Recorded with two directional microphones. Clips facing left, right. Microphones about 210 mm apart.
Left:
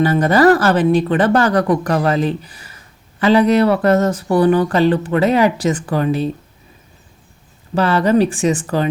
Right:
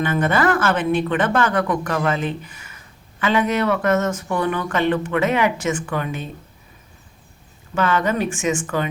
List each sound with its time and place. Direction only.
0.0 s speech: 35° left (ahead or behind)
7.8 s speech: 35° left (ahead or behind)